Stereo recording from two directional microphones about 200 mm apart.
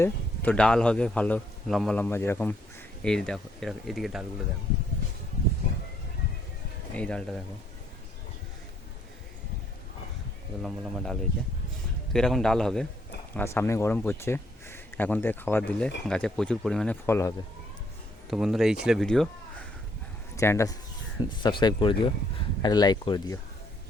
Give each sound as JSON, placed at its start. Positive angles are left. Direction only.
{"t": 0.0, "sound": "speech", "side_deg": 5}
{"t": 6.9, "sound": "speech", "side_deg": 5}
{"t": 10.6, "sound": "speech", "side_deg": 0}
{"t": 18.3, "sound": "speech", "side_deg": 0}
{"t": 20.3, "sound": "speech", "side_deg": 15}